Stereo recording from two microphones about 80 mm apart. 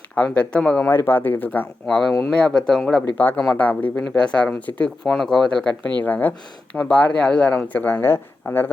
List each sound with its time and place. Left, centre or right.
0.2 s speech: centre
0.9 s a man's voice: left
1.9 s speech: centre
3.2 s a man's voice: left
6.0 s a man's voice: left